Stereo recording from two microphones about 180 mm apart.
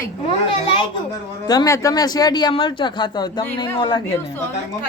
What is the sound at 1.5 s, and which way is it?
Speech, 20° left (ahead or behind).